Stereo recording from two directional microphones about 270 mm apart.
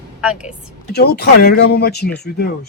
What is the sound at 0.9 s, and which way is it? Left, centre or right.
Speech, left.